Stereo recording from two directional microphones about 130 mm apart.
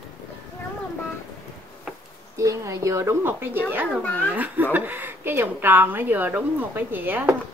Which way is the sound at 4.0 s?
15° left (ahead or behind).